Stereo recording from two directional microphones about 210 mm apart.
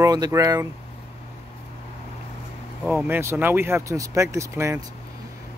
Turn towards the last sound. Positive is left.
turn(degrees=-15)  # may be behind; listen again after turning